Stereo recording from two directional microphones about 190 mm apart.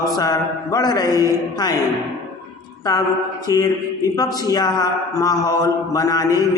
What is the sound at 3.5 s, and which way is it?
A man's voice, 20° left (ahead or behind).